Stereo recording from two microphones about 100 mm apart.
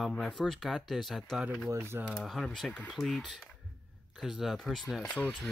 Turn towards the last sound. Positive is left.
turn(degrees=10)  # may be behind; listen again after turning